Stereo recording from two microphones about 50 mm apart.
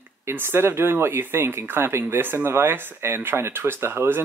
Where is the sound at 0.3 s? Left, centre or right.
Right.